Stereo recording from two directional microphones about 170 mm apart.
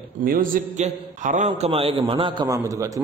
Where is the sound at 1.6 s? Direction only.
35° right (ahead or behind).